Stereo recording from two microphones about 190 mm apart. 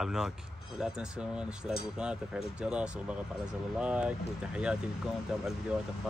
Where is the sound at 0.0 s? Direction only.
5° right (ahead or behind).